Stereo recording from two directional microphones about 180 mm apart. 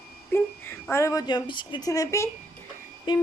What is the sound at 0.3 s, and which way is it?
Speech, 15° left (ahead or behind).